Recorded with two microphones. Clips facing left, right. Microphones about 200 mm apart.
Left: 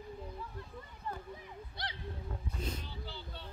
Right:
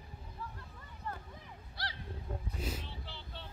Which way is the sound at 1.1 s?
15° left (ahead or behind).